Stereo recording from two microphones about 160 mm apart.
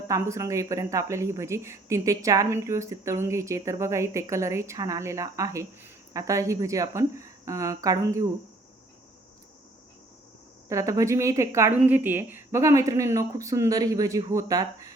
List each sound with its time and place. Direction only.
0.1 s speech: 20° right (ahead or behind)
10.7 s speech: 20° right (ahead or behind)